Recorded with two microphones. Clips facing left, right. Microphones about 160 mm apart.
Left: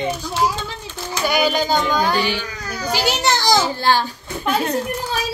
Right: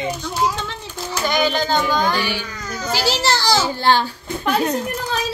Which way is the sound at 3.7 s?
20° right (ahead or behind).